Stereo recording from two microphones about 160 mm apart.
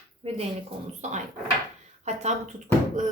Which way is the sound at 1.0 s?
45° right (ahead or behind).